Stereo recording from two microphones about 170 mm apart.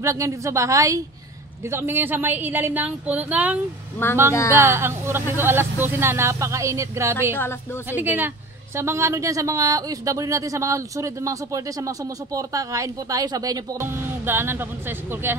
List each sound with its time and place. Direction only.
0.0 s speech: 20° right (ahead or behind)
4.3 s a woman's voice: 15° left (ahead or behind)
4.6 s speech: 15° right (ahead or behind)